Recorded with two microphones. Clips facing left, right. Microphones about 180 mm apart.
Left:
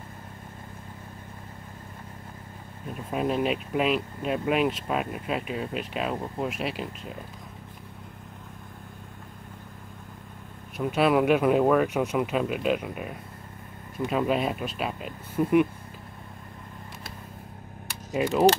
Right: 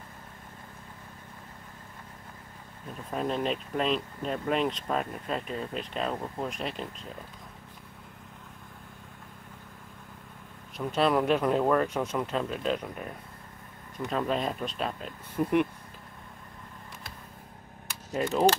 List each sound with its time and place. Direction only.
2.9 s speech: 10° left (ahead or behind)
10.8 s speech: 5° left (ahead or behind)
18.1 s speech: 5° left (ahead or behind)